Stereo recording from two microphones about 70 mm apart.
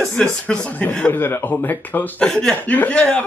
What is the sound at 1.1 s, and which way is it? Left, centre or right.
A man's voice, left.